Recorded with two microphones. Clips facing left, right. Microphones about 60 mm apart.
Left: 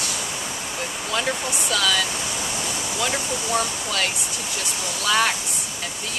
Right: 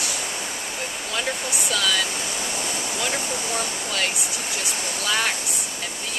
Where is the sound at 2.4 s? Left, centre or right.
Centre.